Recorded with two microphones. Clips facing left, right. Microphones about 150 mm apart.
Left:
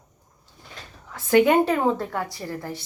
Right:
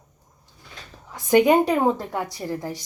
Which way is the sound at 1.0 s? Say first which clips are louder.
Right 1 dB; 15° right (ahead or behind).